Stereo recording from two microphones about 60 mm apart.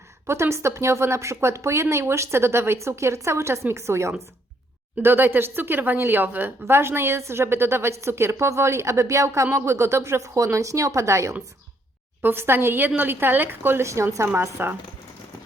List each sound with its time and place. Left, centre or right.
0.3 s a woman's voice: right
5.0 s a woman's voice: right
12.2 s a woman's voice: right
13.8 s a woman's voice: right
14.6 s a woman's voice: right